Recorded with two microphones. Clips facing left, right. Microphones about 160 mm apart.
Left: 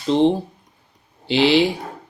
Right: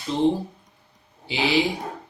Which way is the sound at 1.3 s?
80° left.